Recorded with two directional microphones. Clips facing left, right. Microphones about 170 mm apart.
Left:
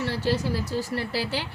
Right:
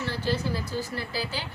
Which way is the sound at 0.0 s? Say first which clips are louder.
Left 3 dB; 70° left (ahead or behind).